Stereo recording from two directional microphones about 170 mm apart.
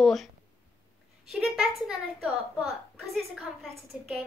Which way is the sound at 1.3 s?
Centre (ahead or behind).